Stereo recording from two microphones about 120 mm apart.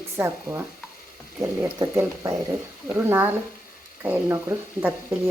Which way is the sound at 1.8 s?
25° right (ahead or behind).